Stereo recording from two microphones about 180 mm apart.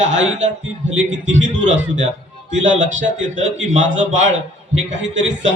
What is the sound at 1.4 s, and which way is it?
A man's voice, 40° right (ahead or behind).